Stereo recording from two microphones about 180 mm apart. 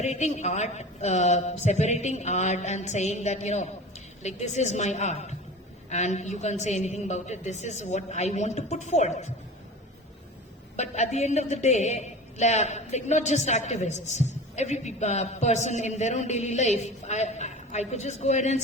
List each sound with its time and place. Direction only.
0.0 s a woman's voice: 40° left (ahead or behind)
10.8 s a woman's voice: 40° left (ahead or behind)